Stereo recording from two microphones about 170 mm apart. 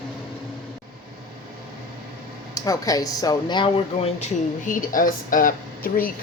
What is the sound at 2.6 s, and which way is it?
Speech, 20° left (ahead or behind).